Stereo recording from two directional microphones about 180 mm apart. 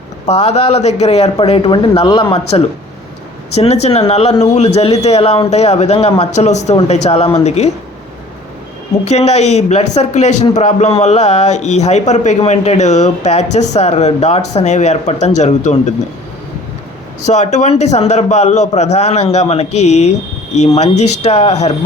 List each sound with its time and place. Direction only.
0.3 s a man's voice: 35° left (ahead or behind)
3.6 s a man's voice: 35° left (ahead or behind)
9.0 s a man's voice: 35° left (ahead or behind)
17.2 s a man's voice: 40° left (ahead or behind)